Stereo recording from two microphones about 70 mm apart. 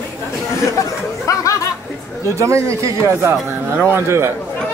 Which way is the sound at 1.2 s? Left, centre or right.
Left.